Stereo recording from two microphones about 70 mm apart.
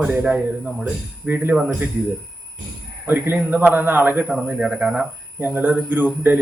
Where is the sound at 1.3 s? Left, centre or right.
Right.